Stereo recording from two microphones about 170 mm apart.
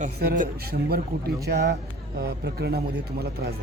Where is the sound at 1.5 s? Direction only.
75° right (ahead or behind).